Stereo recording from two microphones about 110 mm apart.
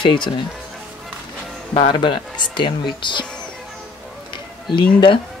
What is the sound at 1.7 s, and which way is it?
Speech, 50° left (ahead or behind).